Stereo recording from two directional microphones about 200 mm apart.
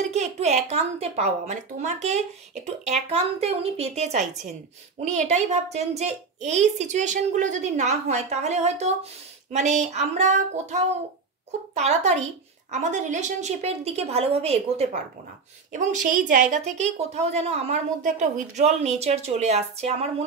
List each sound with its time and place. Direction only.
0.1 s speech: 35° right (ahead or behind)